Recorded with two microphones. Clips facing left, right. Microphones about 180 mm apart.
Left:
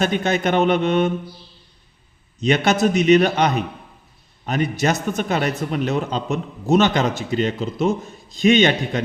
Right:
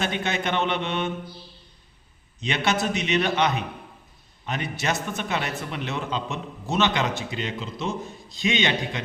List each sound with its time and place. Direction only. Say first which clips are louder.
0.0 s a man's voice: left 7 dB; 40° left (ahead or behind)
2.4 s a man's voice: left 8 dB; 40° left (ahead or behind)